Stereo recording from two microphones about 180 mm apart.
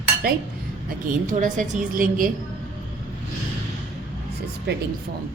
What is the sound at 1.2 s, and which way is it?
A woman's voice, 45° right (ahead or behind).